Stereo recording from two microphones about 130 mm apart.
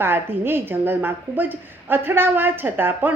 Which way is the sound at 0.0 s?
15° right (ahead or behind).